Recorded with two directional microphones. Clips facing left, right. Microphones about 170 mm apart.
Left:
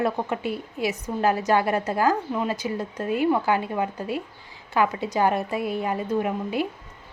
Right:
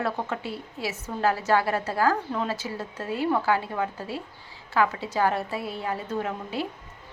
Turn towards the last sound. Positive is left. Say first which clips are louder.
# left 5 dB
turn(degrees=15)  # may be behind; listen again after turning